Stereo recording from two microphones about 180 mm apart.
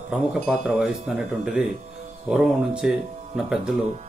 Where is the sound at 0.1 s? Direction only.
5° right (ahead or behind).